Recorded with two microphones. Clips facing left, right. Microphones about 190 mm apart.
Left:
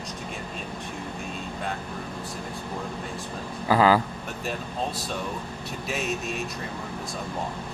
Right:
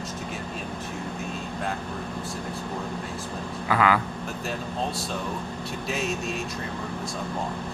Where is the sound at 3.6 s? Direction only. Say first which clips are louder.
Left 3 dB; 30° left (ahead or behind).